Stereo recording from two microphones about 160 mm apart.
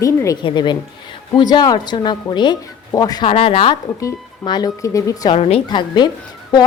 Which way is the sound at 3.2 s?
35° left (ahead or behind).